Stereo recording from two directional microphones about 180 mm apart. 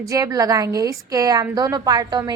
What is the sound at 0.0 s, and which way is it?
A woman's voice, 20° right (ahead or behind).